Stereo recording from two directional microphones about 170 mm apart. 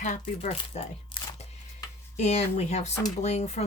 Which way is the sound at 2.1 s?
40° left (ahead or behind).